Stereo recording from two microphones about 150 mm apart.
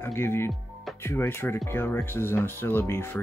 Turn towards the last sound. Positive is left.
turn(degrees=15)  # may be behind; listen again after turning